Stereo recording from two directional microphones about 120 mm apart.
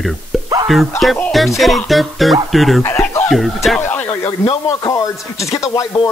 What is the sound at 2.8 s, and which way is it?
Speech, 25° left (ahead or behind).